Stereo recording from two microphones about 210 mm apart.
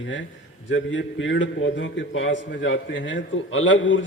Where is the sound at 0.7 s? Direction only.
65° left (ahead or behind).